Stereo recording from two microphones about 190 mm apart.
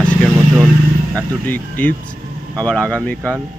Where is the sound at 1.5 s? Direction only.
10° left (ahead or behind).